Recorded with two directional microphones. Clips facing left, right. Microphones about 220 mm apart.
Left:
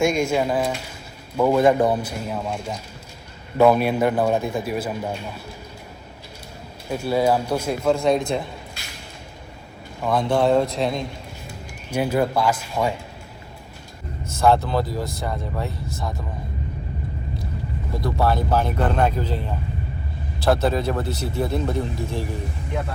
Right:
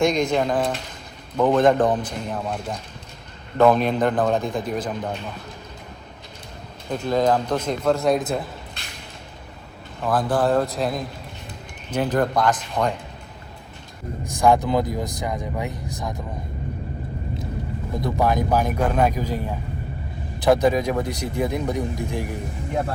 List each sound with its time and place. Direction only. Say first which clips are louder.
0.0 s a man's voice: even; 5° left (ahead or behind)
6.8 s a man's voice: even; 10° left (ahead or behind)
10.0 s a man's voice: left 1 dB; 5° right (ahead or behind)
11.9 s a man's voice: even; 10° left (ahead or behind)
14.3 s speech: even; 15° right (ahead or behind)
18.0 s speech: even; 15° right (ahead or behind)